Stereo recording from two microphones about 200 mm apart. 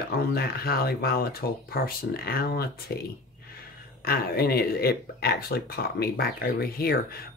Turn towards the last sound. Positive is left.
turn(degrees=50)  # may be behind; listen again after turning